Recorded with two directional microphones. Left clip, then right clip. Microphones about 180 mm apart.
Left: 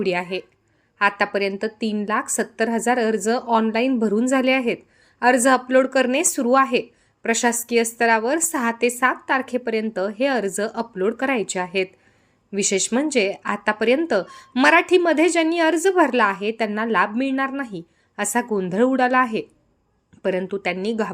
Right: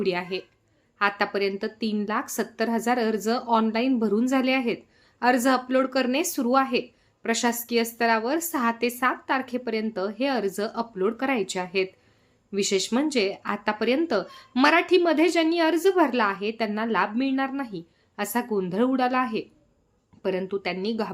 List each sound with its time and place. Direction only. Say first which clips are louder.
0.0 s speech: left 4 dB; 15° left (ahead or behind)